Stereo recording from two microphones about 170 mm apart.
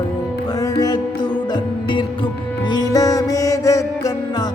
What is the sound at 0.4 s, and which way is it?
Music, 20° left (ahead or behind).